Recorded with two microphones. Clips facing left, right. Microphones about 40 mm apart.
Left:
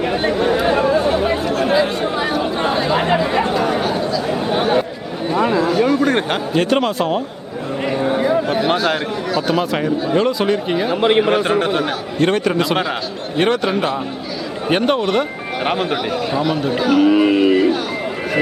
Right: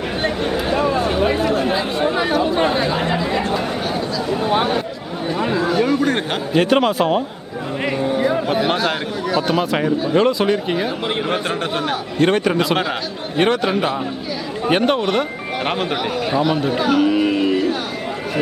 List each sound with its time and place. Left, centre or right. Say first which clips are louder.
0.0 s a sound: left 4 dB; centre
1.1 s chatter: even; centre
2.9 s chatter: left 4 dB; centre
5.3 s a sound: left 4 dB; centre
5.5 s speech: even; centre
8.2 s a man's voice: even; centre
17.1 s speech: left 4 dB; centre